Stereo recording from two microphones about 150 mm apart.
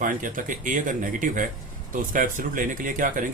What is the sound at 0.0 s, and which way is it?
Speech, 65° right (ahead or behind).